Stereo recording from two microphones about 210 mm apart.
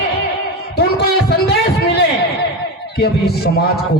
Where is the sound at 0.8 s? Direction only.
50° left (ahead or behind).